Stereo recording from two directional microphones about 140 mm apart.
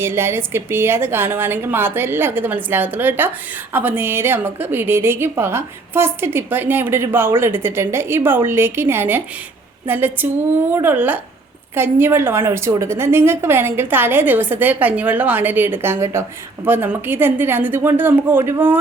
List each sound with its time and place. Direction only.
0.0 s a woman's voice: 15° right (ahead or behind)